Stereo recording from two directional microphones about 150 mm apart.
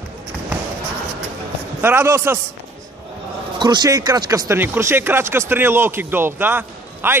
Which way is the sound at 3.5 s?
30° right (ahead or behind).